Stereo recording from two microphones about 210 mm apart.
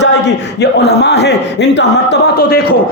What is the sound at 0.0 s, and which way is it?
A man's voice, 55° left (ahead or behind).